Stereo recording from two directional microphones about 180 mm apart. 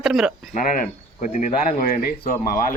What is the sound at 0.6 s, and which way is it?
Speech, 50° left (ahead or behind).